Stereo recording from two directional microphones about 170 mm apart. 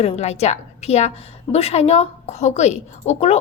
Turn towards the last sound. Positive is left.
turn(degrees=40)  # may be behind; listen again after turning